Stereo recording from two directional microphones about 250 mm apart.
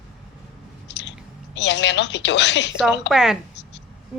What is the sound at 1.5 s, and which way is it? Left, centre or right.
Speech, left.